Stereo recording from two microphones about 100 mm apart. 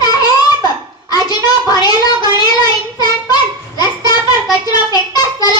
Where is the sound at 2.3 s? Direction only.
45° left (ahead or behind).